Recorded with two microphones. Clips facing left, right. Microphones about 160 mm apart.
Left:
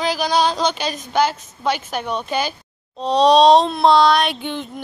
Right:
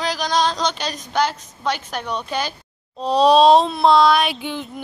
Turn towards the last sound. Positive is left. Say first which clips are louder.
# left 1 dB
turn(degrees=-5)  # may be behind; listen again after turning